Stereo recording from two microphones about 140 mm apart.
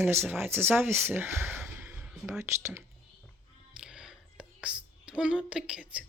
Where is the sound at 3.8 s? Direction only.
5° right (ahead or behind).